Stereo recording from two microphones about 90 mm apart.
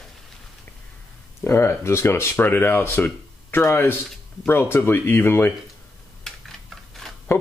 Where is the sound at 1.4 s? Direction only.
30° left (ahead or behind).